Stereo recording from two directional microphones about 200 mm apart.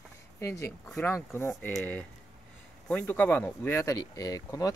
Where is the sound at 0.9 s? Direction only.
10° left (ahead or behind).